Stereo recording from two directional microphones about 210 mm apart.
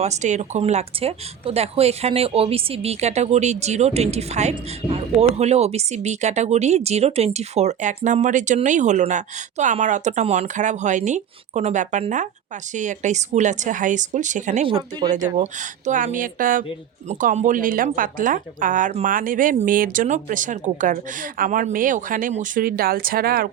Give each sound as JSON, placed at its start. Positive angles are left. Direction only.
{"t": 0.0, "sound": "speech", "side_deg": -35}
{"t": 14.7, "sound": "speech", "side_deg": -20}
{"t": 15.9, "sound": "speech", "side_deg": -40}